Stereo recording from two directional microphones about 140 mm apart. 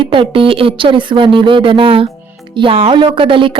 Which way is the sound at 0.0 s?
40° right (ahead or behind).